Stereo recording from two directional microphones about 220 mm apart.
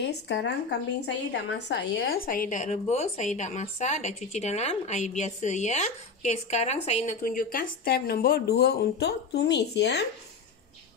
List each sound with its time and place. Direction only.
0.0 s a woman's voice: 50° left (ahead or behind)